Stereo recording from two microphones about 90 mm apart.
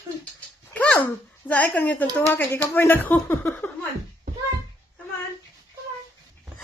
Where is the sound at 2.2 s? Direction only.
25° left (ahead or behind).